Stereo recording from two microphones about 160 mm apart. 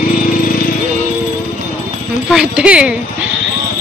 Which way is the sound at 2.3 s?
5° right (ahead or behind).